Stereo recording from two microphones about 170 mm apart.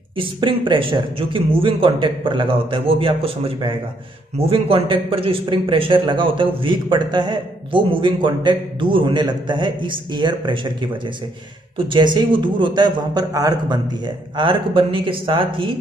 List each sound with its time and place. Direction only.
0.2 s speech: 30° right (ahead or behind)